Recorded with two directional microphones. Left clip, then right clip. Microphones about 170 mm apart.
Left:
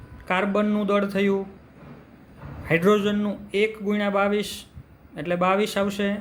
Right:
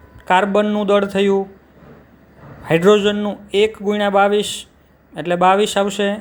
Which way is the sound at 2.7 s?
30° right (ahead or behind).